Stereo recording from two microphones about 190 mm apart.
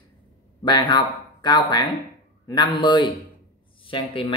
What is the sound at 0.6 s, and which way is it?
Speech, 25° left (ahead or behind).